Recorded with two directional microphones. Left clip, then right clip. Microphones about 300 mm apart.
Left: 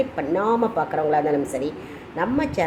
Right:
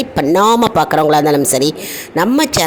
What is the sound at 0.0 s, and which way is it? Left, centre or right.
A woman's voice, right.